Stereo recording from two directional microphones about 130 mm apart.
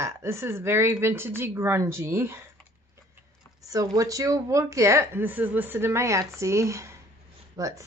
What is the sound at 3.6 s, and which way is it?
A woman's voice, 25° right (ahead or behind).